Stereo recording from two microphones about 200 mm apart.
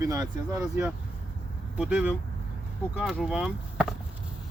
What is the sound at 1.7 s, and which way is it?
Speech, 10° right (ahead or behind).